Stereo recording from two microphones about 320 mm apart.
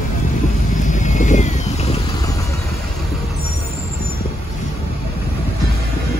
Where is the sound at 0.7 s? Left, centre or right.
Left.